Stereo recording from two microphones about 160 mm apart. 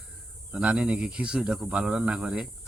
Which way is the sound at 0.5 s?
5° right (ahead or behind).